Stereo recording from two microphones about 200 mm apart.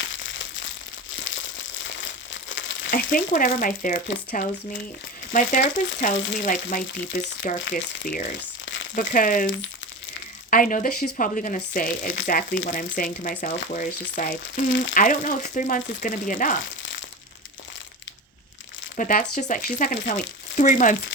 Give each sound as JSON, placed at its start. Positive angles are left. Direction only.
{"t": 2.5, "sound": "frying", "side_deg": 70}
{"t": 2.9, "sound": "speech", "side_deg": 45}
{"t": 8.6, "sound": "crumpling", "side_deg": 70}
{"t": 9.0, "sound": "speech", "side_deg": 40}
{"t": 10.5, "sound": "speech", "side_deg": 45}
{"t": 18.9, "sound": "speech", "side_deg": 40}